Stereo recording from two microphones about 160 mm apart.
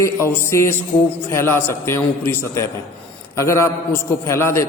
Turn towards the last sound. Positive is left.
turn(degrees=15)  # may be behind; listen again after turning